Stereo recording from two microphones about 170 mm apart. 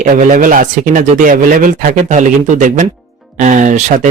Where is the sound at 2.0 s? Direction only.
45° right (ahead or behind).